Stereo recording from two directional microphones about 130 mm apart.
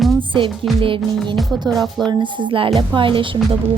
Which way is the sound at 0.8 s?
40° right (ahead or behind).